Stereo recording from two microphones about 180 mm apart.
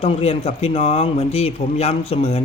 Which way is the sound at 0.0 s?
35° left (ahead or behind).